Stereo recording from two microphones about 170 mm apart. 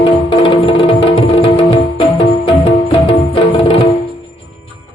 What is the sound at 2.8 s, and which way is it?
Music, 30° left (ahead or behind).